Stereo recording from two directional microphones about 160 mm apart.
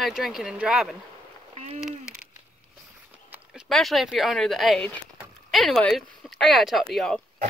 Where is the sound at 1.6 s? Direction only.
45° right (ahead or behind).